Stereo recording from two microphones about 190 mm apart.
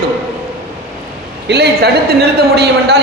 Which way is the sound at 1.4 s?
55° right (ahead or behind).